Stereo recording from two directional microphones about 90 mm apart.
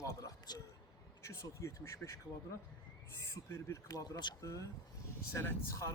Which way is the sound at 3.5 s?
30° left (ahead or behind).